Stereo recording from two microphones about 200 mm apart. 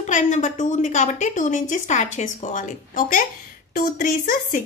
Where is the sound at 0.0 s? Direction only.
35° left (ahead or behind).